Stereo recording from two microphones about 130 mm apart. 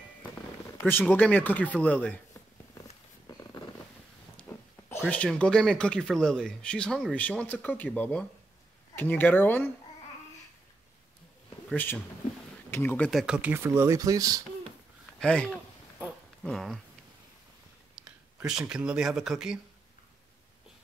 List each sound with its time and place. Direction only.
0.8 s speech: 15° left (ahead or behind)
5.1 s speech: 10° left (ahead or behind)
11.7 s speech: 15° left (ahead or behind)
13.1 s speech: 5° right (ahead or behind); by 14.4 s 25° right (ahead or behind)
15.1 s speech: 10° left (ahead or behind)
18.0 s speech: 5° right (ahead or behind)